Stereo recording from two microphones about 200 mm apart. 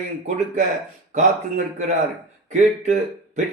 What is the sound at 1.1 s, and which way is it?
A man's voice, 35° right (ahead or behind).